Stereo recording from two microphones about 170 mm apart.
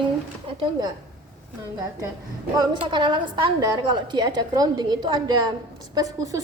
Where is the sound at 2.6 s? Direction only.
30° right (ahead or behind).